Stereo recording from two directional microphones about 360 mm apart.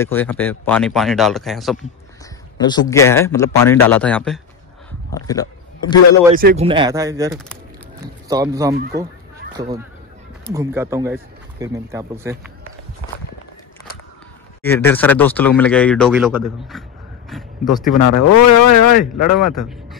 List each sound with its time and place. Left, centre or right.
0.0 s speech: centre
2.6 s speech: centre
6.3 s speech: right
10.5 s speech: centre
14.6 s speech: centre
17.9 s speech: left
19.6 s speech: centre